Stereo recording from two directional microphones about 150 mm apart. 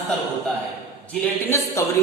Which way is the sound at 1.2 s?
20° left (ahead or behind).